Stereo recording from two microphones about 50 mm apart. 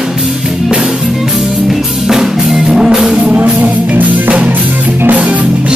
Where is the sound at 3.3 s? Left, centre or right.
Right.